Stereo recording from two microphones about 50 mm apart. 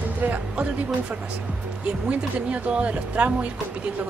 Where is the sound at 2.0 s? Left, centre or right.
Right.